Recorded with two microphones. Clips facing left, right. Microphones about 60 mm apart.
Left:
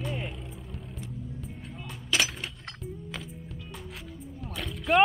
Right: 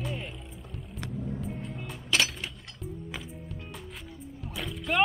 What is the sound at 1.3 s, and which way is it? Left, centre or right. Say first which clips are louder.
Vehicle: right 5 dB; centre.